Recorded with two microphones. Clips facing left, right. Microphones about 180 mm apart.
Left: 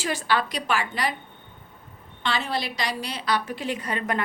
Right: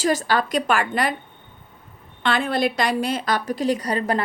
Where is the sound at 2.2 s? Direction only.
55° right (ahead or behind).